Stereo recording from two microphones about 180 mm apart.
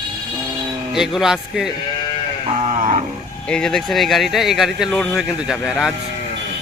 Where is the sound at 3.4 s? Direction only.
5° left (ahead or behind).